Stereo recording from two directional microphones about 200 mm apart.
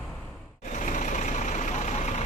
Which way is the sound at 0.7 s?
40° left (ahead or behind).